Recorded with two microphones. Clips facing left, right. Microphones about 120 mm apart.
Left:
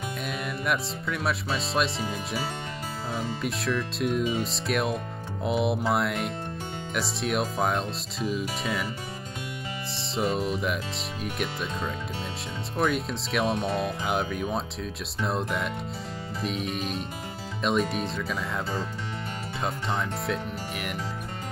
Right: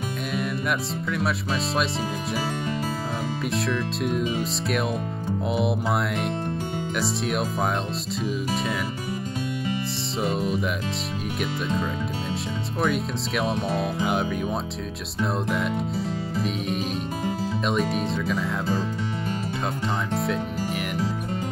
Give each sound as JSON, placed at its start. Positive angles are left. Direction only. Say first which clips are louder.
{"t": 0.7, "sound": "speech", "louder": "right 2 dB", "side_deg": 0}
{"t": 3.4, "sound": "speech", "louder": "right 3 dB", "side_deg": 0}
{"t": 10.1, "sound": "speech", "louder": "right 1 dB", "side_deg": 0}
{"t": 12.7, "sound": "speech", "louder": "right 1 dB", "side_deg": 0}